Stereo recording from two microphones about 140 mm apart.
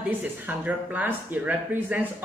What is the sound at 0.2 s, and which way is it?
Speech, 10° right (ahead or behind).